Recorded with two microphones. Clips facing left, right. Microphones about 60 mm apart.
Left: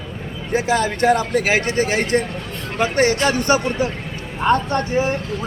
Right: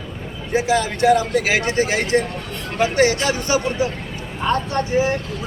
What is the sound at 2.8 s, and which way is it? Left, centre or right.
Speech, left.